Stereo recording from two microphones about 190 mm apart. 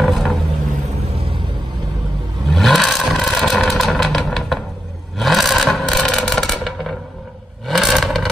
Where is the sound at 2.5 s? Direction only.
Centre (ahead or behind).